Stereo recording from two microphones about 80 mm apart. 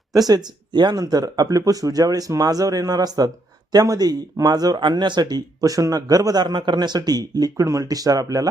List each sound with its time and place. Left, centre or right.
0.1 s a man's voice: right
4.8 s a man's voice: right